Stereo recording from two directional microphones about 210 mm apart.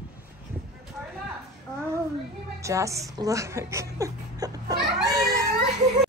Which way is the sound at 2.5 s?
15° right (ahead or behind).